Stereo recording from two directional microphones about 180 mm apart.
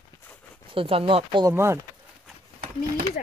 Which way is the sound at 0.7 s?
30° right (ahead or behind).